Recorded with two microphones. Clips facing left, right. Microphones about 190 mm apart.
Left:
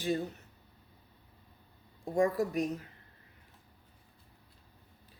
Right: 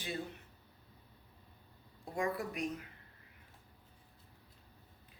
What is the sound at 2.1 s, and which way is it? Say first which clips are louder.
Speech: left 8 dB; 40° left (ahead or behind).